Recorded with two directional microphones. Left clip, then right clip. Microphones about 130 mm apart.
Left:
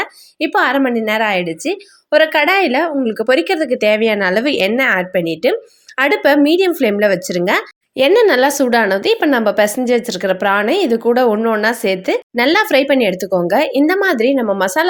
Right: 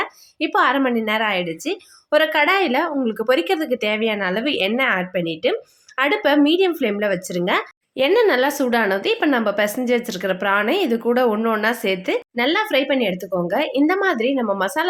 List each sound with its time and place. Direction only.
0.0 s a woman's voice: 25° left (ahead or behind)